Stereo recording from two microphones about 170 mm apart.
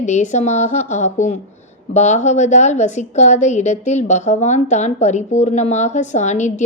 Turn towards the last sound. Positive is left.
turn(degrees=45)  # may be behind; listen again after turning